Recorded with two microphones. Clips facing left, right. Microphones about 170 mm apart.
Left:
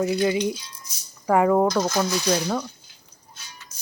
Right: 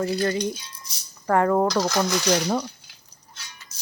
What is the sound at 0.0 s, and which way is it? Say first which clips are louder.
Speech: left 2 dB; 15° left (ahead or behind).